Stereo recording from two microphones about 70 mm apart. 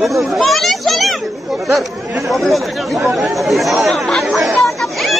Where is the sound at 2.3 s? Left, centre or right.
Centre.